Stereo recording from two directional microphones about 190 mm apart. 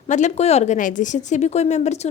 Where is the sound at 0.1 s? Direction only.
40° left (ahead or behind).